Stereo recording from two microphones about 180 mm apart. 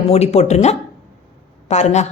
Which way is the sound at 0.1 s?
40° left (ahead or behind).